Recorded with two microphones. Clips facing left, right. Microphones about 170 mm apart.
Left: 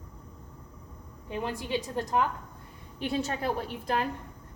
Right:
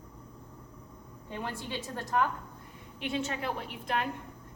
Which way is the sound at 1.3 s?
15° left (ahead or behind).